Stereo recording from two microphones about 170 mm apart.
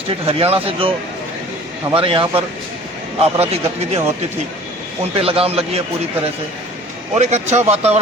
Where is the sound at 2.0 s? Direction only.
30° right (ahead or behind).